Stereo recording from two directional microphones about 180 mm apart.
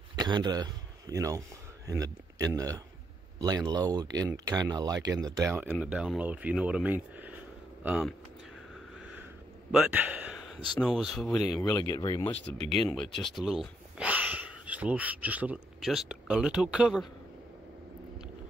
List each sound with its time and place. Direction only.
0.1 s a man's voice: 25° right (ahead or behind); by 8.1 s 5° right (ahead or behind)
9.7 s a sound: 5° right (ahead or behind)
10.8 s speech: centre (ahead or behind)
11.9 s speech: 20° left (ahead or behind)
12.5 s speech: 35° right (ahead or behind)
12.9 s speech: centre (ahead or behind)